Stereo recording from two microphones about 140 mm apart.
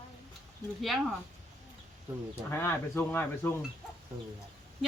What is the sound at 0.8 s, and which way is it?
Speech, centre (ahead or behind).